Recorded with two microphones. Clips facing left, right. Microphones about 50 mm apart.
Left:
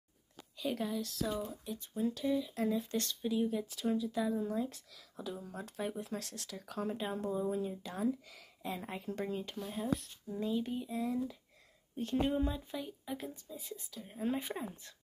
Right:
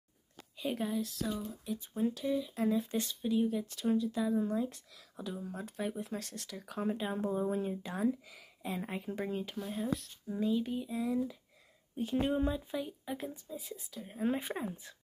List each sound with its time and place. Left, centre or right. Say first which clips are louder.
0.6 s speech: right 2 dB; centre
3.2 s speech: right 3 dB; centre
7.3 s speech: right 1 dB; right
7.7 s speech: right 3 dB; right
8.3 s speech: right 1 dB; centre
13.9 s speech: right 3 dB; centre